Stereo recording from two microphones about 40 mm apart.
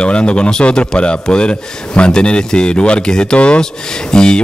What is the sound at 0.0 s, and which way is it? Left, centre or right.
Speech, left.